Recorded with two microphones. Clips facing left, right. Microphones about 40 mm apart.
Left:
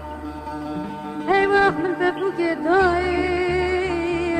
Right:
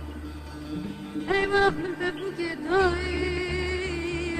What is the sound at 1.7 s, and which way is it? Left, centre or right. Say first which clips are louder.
Music: left 7 dB; left.